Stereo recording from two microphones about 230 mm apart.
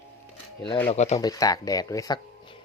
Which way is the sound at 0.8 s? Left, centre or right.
Left.